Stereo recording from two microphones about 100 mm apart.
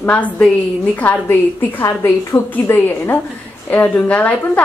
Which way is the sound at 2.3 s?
50° left (ahead or behind).